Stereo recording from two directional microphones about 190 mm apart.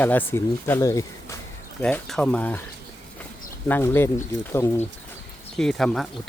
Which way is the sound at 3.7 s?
10° left (ahead or behind).